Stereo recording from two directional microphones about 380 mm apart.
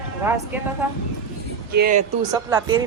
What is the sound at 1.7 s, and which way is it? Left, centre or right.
Speech, right.